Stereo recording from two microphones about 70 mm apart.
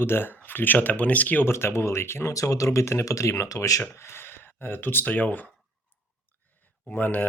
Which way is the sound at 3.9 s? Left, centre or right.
Left.